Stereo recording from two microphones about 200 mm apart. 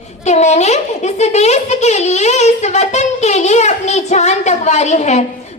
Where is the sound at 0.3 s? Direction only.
35° left (ahead or behind).